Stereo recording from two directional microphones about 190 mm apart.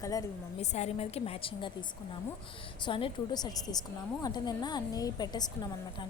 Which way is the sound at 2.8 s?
25° left (ahead or behind).